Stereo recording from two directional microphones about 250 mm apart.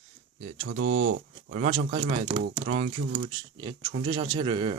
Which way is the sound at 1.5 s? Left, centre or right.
Right.